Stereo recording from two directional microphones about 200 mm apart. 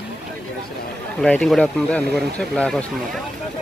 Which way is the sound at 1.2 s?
5° left (ahead or behind).